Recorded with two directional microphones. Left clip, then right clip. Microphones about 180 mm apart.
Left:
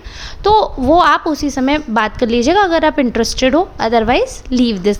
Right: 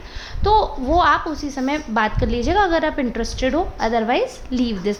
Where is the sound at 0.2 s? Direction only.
40° left (ahead or behind).